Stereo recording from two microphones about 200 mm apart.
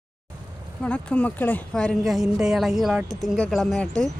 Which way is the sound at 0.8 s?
5° left (ahead or behind).